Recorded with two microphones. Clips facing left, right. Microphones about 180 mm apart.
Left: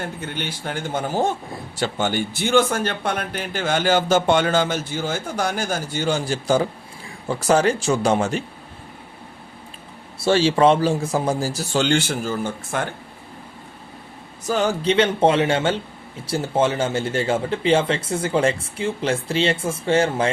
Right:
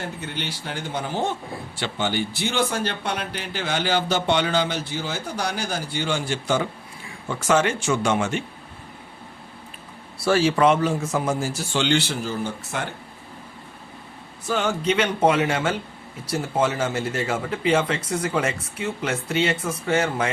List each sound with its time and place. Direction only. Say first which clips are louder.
0.0 s speech: left 2 dB; 50° left (ahead or behind); by 8.4 s 35° left (ahead or behind)
10.2 s speech: left 2 dB; 25° left (ahead or behind); by 12.8 s 50° left (ahead or behind)
14.4 s a man's voice: left 3 dB; 40° left (ahead or behind)